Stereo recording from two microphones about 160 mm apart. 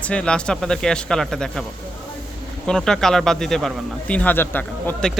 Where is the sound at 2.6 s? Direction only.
5° left (ahead or behind).